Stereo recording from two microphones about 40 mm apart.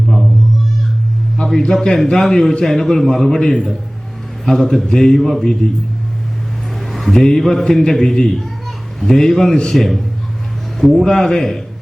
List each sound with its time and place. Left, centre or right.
1.5 s a man's voice: centre
6.7 s a sound: centre
7.1 s a man's voice: centre
11.0 s a man's voice: centre